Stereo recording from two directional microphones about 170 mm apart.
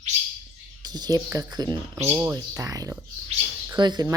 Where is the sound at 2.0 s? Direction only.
10° right (ahead or behind).